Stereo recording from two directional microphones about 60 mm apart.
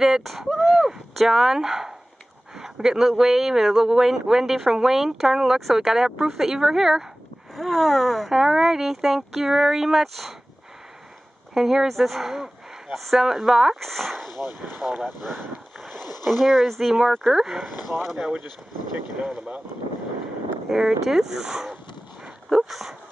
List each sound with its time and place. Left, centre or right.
0.0 s speech: centre
11.5 s speech: centre
14.8 s boat: centre
16.3 s speech: centre
20.7 s speech: centre
22.2 s dog: centre